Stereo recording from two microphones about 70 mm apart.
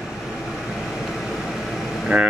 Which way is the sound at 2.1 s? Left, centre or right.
Centre.